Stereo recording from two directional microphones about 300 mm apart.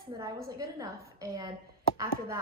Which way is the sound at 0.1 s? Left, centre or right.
Centre.